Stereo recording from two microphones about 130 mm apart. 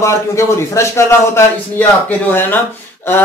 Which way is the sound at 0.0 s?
25° left (ahead or behind).